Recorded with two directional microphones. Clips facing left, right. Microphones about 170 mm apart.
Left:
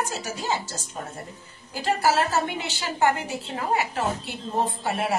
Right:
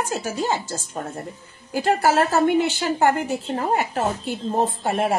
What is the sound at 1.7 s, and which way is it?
A woman's voice, 50° right (ahead or behind).